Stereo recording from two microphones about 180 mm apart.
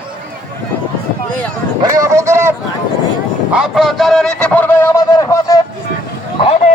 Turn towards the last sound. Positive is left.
turn(degrees=35)  # may be behind; listen again after turning